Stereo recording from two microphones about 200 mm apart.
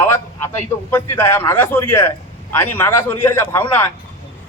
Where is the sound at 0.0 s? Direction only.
10° left (ahead or behind).